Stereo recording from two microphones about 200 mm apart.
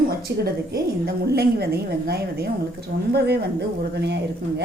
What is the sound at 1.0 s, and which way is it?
A woman's voice, 50° right (ahead or behind).